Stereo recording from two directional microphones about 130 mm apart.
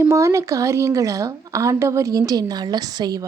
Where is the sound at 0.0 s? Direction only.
25° right (ahead or behind).